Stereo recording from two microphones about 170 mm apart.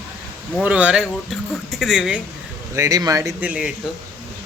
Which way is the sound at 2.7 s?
20° right (ahead or behind).